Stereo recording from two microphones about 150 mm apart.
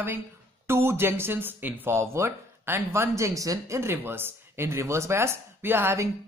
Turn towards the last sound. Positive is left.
turn(degrees=-15)  # may be behind; listen again after turning